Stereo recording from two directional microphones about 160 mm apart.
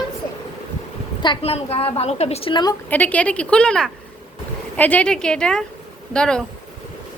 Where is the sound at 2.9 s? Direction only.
10° left (ahead or behind).